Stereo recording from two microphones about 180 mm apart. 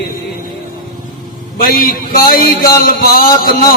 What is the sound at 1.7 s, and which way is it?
A man's voice, 55° left (ahead or behind).